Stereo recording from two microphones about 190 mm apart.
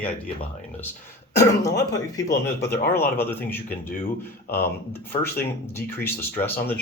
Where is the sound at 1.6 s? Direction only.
15° left (ahead or behind).